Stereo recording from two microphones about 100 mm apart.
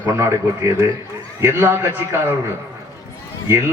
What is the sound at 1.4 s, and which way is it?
Speech, 25° right (ahead or behind).